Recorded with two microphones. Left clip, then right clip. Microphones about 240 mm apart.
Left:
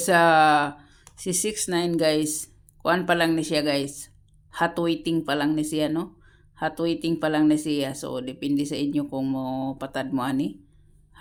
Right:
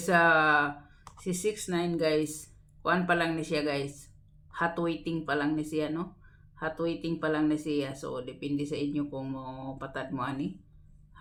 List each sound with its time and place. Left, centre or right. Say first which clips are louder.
0.0 s speech: left 6 dB; left